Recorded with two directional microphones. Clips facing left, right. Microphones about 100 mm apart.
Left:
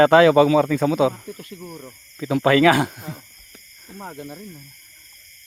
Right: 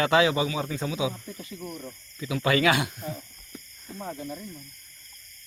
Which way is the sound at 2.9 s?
75° left (ahead or behind).